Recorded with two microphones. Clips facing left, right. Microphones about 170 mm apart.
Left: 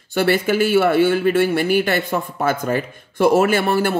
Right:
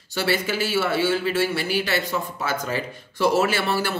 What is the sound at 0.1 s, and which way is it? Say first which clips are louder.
A man's voice: left 7 dB; 55° left (ahead or behind).